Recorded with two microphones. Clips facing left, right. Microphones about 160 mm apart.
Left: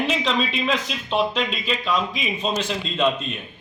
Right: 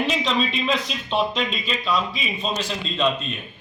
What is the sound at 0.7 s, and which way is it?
Speech, 10° left (ahead or behind).